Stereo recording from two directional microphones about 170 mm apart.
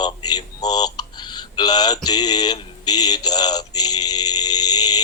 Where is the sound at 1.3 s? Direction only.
25° left (ahead or behind).